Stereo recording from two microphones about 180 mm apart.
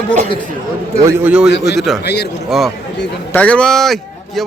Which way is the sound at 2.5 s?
Centre (ahead or behind).